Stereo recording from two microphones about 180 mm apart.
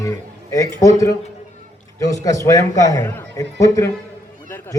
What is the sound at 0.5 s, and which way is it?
A man's voice, 20° left (ahead or behind).